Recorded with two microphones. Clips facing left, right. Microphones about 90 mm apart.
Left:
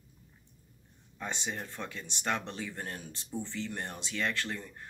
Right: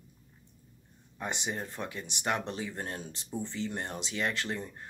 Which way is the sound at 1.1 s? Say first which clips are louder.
Right 2 dB; 15° right (ahead or behind).